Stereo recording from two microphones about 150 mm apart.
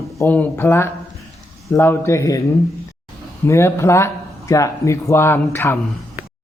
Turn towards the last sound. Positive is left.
turn(degrees=15)  # may be behind; listen again after turning